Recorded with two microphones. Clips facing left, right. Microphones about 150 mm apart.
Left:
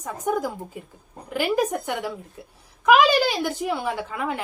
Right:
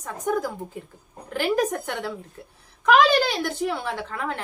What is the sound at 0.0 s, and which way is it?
Speech, 10° left (ahead or behind).